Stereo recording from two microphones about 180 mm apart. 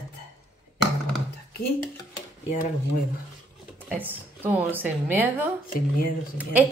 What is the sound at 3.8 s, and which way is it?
A woman's voice, 10° right (ahead or behind).